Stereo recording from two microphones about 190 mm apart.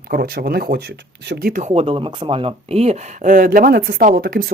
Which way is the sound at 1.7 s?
30° right (ahead or behind).